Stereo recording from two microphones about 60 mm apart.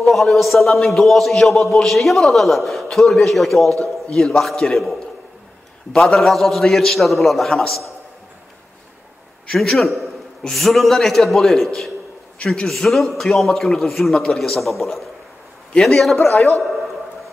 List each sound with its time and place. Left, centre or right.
0.0 s a man's voice: centre
3.6 s a man's voice: right
4.1 s a man's voice: centre
5.9 s a man's voice: centre
9.5 s a man's voice: centre